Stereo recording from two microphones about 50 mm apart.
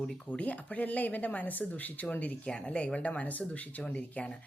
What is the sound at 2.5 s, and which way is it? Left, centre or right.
Speech, left.